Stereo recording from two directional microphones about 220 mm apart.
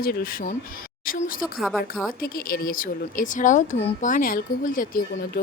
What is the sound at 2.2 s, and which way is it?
Speech, 40° left (ahead or behind).